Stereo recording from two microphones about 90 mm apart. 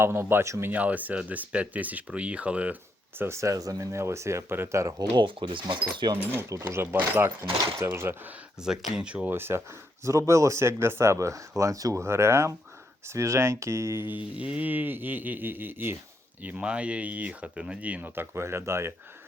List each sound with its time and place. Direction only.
0.0 s speech: 25° right (ahead or behind)
0.7 s speech: 15° right (ahead or behind)
3.2 s speech: 30° right (ahead or behind)
5.1 s speech: 65° right (ahead or behind)
6.5 s speech: 30° right (ahead or behind)
8.6 s speech: 10° right (ahead or behind)
9.3 s speech: 25° right (ahead or behind)
14.3 s speech: 15° right (ahead or behind); by 18.9 s 30° right (ahead or behind)